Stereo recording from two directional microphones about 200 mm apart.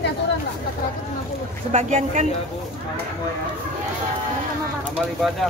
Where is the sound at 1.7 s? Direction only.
35° right (ahead or behind).